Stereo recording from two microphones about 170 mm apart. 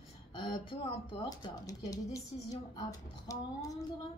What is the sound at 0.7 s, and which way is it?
Speech, 30° left (ahead or behind).